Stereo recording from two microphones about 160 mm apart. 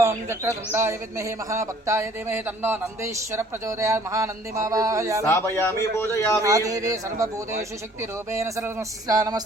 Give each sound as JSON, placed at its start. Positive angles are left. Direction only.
{"t": 0.0, "sound": "speech", "side_deg": -15}
{"t": 5.2, "sound": "a man's voice", "side_deg": 20}
{"t": 6.4, "sound": "speech", "side_deg": -20}
{"t": 8.3, "sound": "speech", "side_deg": -20}